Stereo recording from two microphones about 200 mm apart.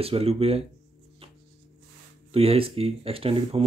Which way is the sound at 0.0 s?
30° right (ahead or behind).